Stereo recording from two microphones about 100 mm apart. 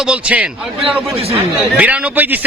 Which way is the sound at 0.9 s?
75° right (ahead or behind).